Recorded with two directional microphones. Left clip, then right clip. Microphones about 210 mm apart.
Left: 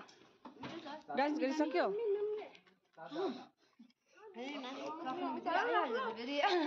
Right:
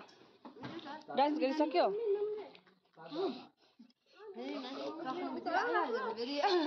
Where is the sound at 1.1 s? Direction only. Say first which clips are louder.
Right 3 dB; 10° left (ahead or behind).